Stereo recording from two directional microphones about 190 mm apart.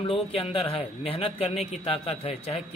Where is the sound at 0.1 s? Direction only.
30° left (ahead or behind).